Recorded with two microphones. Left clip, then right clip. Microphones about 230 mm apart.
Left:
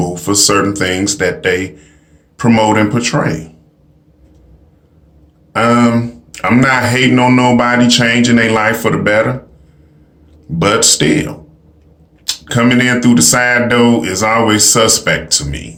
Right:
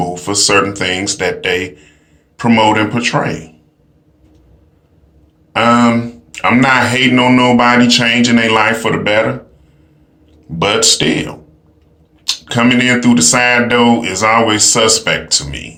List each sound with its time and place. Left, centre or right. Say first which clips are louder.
0.0 s speech: left 1 dB; centre
5.5 s speech: right 1 dB; centre
10.6 s speech: even; centre
12.5 s speech: even; centre